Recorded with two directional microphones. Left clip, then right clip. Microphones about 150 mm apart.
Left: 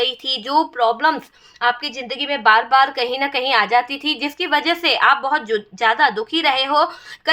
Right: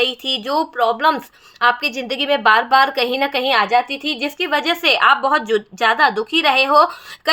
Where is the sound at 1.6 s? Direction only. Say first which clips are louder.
Right 3 dB; 35° right (ahead or behind).